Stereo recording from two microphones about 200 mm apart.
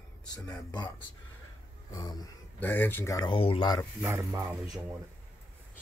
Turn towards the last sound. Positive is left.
turn(degrees=-5)  # may be behind; listen again after turning